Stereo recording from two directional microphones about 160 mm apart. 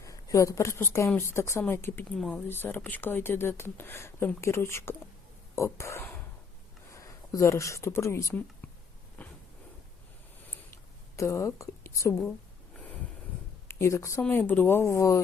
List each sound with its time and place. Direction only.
0.0 s speech: 20° left (ahead or behind)
2.1 s speech: centre (ahead or behind)
2.5 s speech: 15° left (ahead or behind)
9.2 s a sound: 10° left (ahead or behind)
11.2 s speech: 20° left (ahead or behind)
13.7 s a woman's voice: 15° left (ahead or behind)